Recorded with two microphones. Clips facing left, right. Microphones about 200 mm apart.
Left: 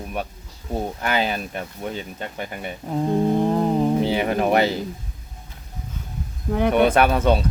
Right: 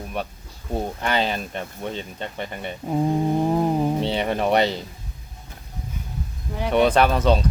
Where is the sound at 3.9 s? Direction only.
5° left (ahead or behind).